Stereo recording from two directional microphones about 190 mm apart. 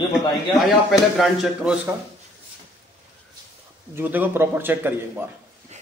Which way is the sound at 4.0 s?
10° right (ahead or behind).